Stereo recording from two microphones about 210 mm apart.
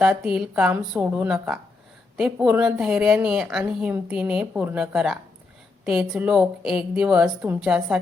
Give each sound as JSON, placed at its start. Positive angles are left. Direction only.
{"t": 0.0, "sound": "a woman's voice", "side_deg": -5}